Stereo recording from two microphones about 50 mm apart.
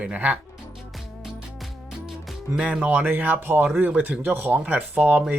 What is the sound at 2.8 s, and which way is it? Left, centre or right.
Speech, right.